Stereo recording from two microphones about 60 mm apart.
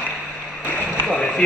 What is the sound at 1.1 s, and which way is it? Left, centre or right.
Run, centre.